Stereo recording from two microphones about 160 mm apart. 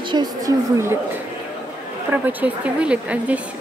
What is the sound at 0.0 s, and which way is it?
Speech, 30° right (ahead or behind).